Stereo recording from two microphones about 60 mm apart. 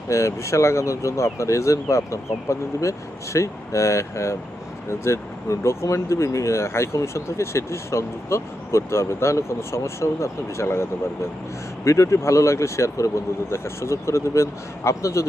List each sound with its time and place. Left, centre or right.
0.1 s speech: left